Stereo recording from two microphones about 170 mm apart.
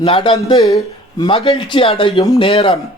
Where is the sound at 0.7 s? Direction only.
20° left (ahead or behind).